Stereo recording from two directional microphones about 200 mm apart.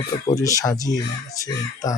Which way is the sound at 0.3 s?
15° left (ahead or behind).